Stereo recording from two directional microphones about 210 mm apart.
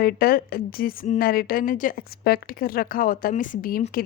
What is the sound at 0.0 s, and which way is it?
A woman's voice, 45° left (ahead or behind).